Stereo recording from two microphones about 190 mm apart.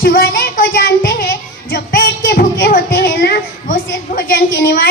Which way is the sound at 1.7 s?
50° left (ahead or behind).